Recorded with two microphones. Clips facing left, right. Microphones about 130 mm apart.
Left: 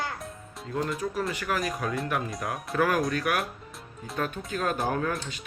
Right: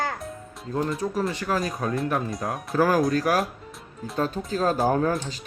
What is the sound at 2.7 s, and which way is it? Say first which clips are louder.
Speech: right 5 dB; 35° right (ahead or behind).